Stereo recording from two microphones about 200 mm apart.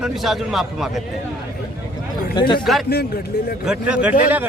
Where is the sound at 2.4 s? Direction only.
25° left (ahead or behind).